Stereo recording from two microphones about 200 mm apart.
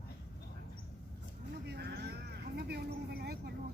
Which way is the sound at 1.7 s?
55° right (ahead or behind).